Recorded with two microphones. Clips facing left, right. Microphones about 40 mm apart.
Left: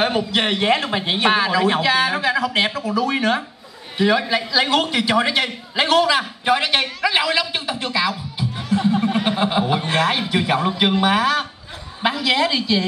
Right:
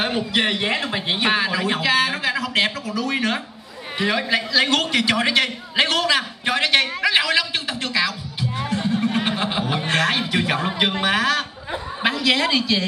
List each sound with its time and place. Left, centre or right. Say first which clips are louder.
0.0 s a man's voice: left 2 dB; centre
2.8 s speech: left 5 dB; centre
3.1 s a man's voice: left 3 dB; centre
8.9 s a sound: left 2 dB; centre
9.2 s a man's voice: left 4 dB; centre